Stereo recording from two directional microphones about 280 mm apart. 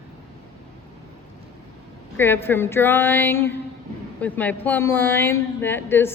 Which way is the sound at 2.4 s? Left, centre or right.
Centre.